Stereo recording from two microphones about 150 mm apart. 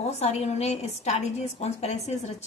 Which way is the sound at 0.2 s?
45° left (ahead or behind).